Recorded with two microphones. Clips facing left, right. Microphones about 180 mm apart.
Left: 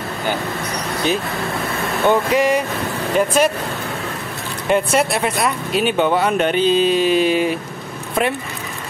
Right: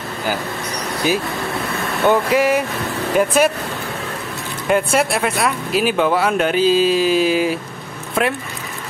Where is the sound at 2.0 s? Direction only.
5° right (ahead or behind).